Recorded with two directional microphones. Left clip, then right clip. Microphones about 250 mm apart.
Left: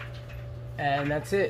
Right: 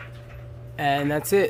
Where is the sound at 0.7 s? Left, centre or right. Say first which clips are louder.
Right 4 dB; right.